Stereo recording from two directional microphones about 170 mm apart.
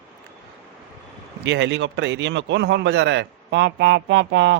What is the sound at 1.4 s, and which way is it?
Speech, 90° right.